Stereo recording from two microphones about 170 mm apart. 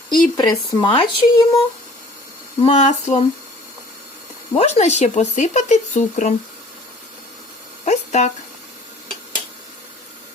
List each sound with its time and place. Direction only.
0.1 s speech: 25° left (ahead or behind)
2.6 s speech: 40° left (ahead or behind)
4.5 s speech: 40° left (ahead or behind)
7.9 s speech: 45° left (ahead or behind)